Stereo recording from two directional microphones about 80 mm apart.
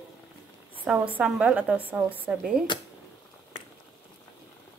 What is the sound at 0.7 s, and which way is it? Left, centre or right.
A woman's voice, centre.